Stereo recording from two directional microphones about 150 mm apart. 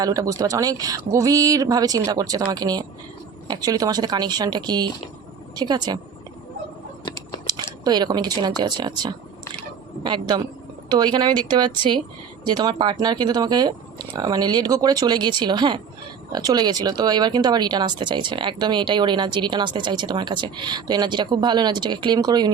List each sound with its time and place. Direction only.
0.0 s speech: 25° right (ahead or behind)
7.4 s speech: 25° right (ahead or behind)